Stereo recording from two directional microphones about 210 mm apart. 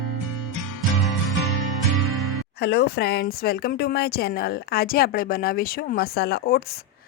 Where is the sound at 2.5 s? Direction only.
50° left (ahead or behind).